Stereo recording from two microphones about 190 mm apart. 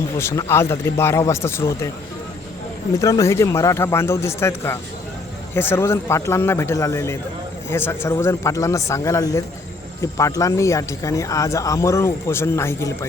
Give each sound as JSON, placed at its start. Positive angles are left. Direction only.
{"t": 0.2, "sound": "speech", "side_deg": 15}
{"t": 3.0, "sound": "speech", "side_deg": 15}